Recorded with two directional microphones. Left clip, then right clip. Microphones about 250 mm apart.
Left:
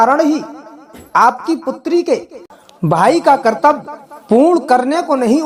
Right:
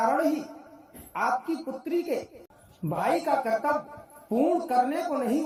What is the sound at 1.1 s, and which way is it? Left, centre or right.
A woman's voice, centre.